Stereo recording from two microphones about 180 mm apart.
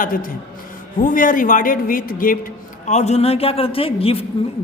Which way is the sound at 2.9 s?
40° left (ahead or behind).